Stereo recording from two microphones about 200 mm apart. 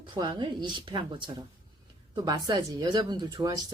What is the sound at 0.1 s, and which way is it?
Speech, 20° right (ahead or behind).